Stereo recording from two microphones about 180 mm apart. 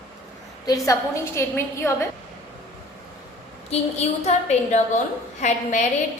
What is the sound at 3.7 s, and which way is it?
A woman's voice, 40° left (ahead or behind).